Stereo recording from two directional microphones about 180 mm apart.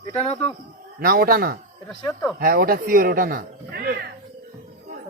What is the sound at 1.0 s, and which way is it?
Speech, 55° right (ahead or behind).